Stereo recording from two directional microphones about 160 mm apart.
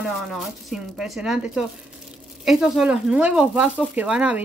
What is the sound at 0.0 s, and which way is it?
Speech, centre (ahead or behind).